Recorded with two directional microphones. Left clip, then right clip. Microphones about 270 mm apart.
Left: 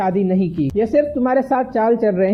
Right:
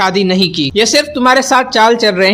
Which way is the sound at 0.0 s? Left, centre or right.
Centre.